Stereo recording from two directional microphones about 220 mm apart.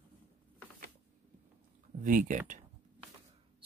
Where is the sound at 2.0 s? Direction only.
35° right (ahead or behind).